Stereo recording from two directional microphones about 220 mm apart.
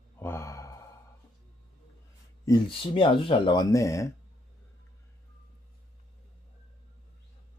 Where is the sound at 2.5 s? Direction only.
25° left (ahead or behind).